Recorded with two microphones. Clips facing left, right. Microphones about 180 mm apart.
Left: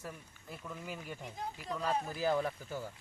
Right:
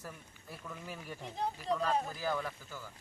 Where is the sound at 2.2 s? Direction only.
25° left (ahead or behind).